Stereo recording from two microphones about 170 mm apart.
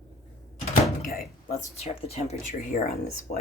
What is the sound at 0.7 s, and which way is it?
Door, 55° left (ahead or behind).